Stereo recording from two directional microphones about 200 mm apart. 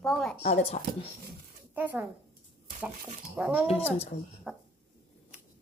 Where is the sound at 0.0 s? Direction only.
Centre (ahead or behind).